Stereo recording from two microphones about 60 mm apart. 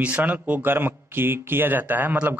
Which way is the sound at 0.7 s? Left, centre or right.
Right.